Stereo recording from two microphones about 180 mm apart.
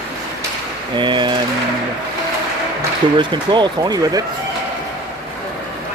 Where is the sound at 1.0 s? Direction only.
25° right (ahead or behind).